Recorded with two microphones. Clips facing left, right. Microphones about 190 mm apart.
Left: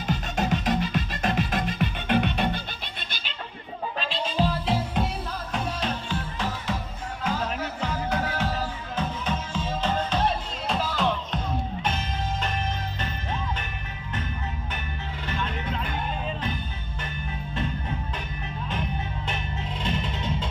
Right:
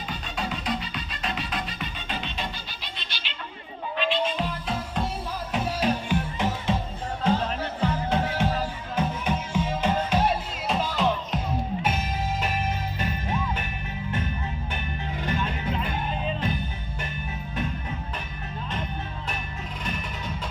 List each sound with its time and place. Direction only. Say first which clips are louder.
0.1 s music: left 7 dB; 45° left (ahead or behind)
3.9 s music: right 2 dB; 35° left (ahead or behind)
5.8 s music: right 5 dB; 15° right (ahead or behind)
7.3 s music: right 3 dB; 30° right (ahead or behind)
9.0 s music: right 3 dB; 15° right (ahead or behind)
19.8 s music: left 4 dB; 25° left (ahead or behind)